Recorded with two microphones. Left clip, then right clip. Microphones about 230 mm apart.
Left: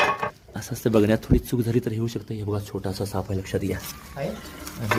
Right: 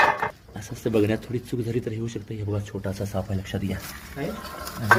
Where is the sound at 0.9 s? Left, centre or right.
Left.